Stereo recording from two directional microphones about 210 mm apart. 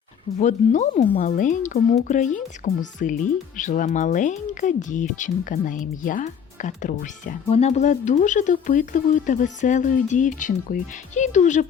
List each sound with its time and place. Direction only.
0.3 s speech: 35° left (ahead or behind)